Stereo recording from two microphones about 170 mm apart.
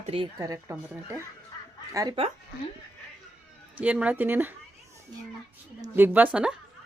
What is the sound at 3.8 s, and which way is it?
Speech, 10° right (ahead or behind).